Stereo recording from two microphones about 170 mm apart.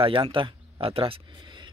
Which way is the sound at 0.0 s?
30° right (ahead or behind).